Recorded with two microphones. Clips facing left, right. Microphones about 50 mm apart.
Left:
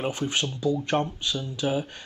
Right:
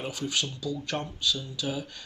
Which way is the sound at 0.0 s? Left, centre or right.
Left.